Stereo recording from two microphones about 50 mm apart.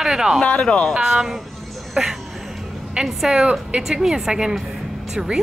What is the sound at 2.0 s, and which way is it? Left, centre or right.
Speech, right.